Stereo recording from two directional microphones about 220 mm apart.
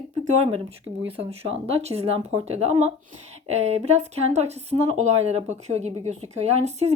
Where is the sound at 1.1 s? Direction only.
25° right (ahead or behind).